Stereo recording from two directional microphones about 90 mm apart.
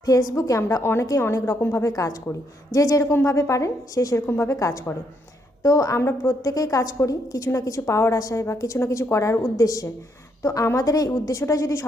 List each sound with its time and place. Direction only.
0.0 s a woman's voice: 40° left (ahead or behind)